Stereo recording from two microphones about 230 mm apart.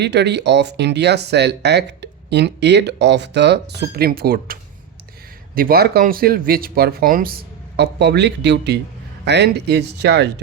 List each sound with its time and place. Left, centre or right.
0.0 s speech: right
5.5 s speech: right